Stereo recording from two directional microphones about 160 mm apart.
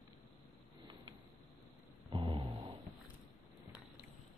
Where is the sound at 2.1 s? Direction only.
35° right (ahead or behind).